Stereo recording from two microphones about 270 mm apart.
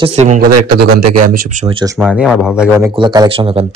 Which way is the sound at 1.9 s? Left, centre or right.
Centre.